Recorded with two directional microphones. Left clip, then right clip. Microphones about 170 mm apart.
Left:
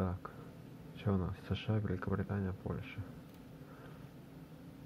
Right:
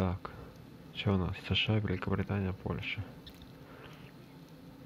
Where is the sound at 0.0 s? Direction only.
20° right (ahead or behind).